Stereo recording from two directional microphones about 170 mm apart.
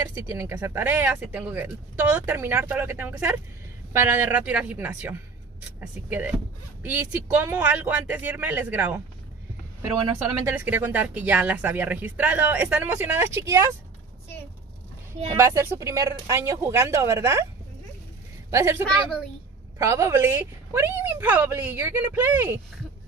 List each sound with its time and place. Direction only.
0.3 s speech: 15° right (ahead or behind)
15.3 s speech: 15° right (ahead or behind)
18.5 s speech: 15° right (ahead or behind)